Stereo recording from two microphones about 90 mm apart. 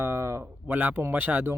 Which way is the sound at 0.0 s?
30° right (ahead or behind).